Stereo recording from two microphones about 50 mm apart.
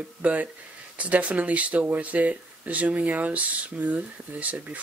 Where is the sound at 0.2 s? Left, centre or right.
Right.